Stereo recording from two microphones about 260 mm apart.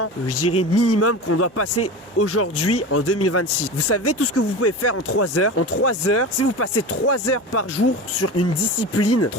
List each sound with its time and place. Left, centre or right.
0.0 s speech: left